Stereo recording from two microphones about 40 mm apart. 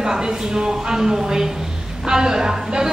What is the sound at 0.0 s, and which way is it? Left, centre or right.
A woman's voice, centre.